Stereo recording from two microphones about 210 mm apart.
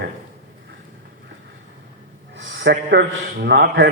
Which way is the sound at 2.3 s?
55° right (ahead or behind).